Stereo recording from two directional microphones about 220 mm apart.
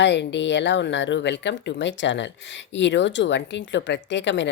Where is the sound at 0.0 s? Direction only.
50° left (ahead or behind).